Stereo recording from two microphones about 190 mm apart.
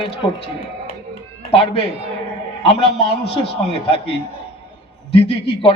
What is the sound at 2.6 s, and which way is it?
A man's voice, 30° left (ahead or behind).